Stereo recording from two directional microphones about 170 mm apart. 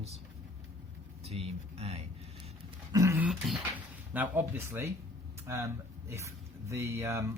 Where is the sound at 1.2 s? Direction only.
35° right (ahead or behind).